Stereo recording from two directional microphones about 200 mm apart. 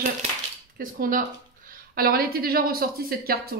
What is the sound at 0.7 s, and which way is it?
A woman's voice, 45° right (ahead or behind).